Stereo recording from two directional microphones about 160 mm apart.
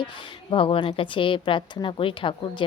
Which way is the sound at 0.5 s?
35° left (ahead or behind).